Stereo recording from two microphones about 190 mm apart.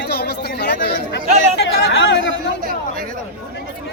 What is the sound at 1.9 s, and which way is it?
Speech, 80° left.